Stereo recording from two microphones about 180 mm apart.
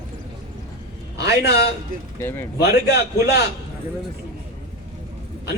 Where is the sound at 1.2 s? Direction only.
65° left (ahead or behind).